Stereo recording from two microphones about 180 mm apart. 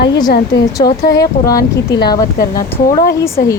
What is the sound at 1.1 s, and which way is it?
Speech, 20° left (ahead or behind).